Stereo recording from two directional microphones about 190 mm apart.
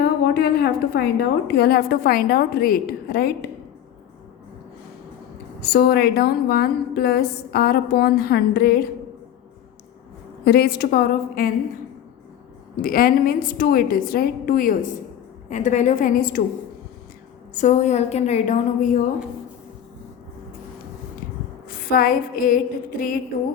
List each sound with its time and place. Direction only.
0.0 s a woman's voice: 55° left (ahead or behind)
5.6 s a woman's voice: 55° left (ahead or behind)
10.4 s a woman's voice: 55° left (ahead or behind)
12.7 s a woman's voice: 50° left (ahead or behind)
17.5 s a woman's voice: 40° left (ahead or behind)
21.7 s a woman's voice: 50° left (ahead or behind)